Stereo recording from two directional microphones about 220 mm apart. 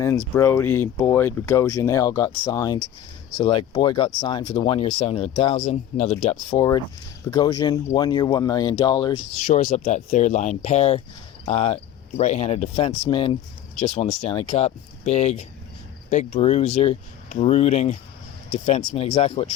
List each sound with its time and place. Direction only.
0.3 s speech: 10° left (ahead or behind); by 6.3 s 30° left (ahead or behind)
6.3 s speech: 15° left (ahead or behind)
9.3 s speech: 30° left (ahead or behind)